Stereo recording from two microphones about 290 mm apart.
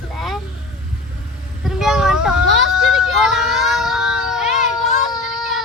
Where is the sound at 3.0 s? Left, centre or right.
Centre.